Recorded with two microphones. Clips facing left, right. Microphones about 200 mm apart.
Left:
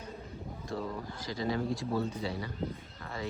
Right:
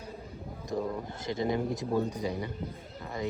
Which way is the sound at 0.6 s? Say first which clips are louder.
Right 5 dB; 20° right (ahead or behind).